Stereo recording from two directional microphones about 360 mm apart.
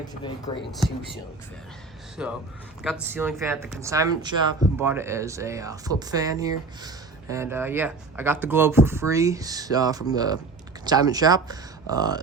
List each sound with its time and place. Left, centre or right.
0.5 s speech: centre
2.2 s speech: centre